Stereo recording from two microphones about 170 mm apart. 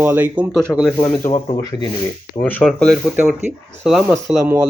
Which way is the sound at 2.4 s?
10° left (ahead or behind).